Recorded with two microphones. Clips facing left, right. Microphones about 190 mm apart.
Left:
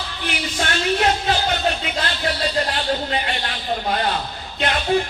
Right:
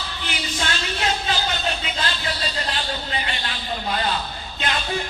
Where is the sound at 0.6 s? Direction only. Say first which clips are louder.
Left 7 dB; 55° left (ahead or behind).